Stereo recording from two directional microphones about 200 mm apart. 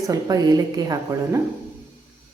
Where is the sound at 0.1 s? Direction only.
20° right (ahead or behind).